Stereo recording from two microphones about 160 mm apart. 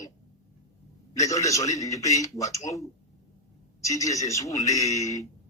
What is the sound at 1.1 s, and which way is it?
A man's voice, 20° left (ahead or behind).